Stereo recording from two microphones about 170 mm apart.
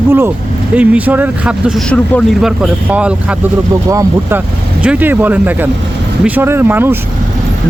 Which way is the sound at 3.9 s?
20° right (ahead or behind).